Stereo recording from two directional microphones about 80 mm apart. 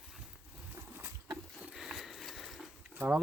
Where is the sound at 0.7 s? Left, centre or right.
Right.